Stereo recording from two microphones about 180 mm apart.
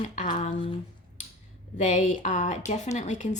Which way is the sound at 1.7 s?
40° left (ahead or behind).